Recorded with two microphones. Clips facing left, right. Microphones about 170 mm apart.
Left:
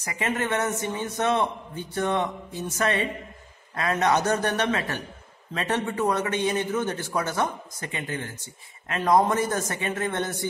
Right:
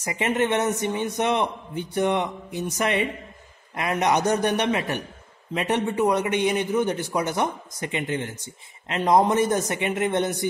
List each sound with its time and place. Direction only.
0.0 s a man's voice: 20° right (ahead or behind)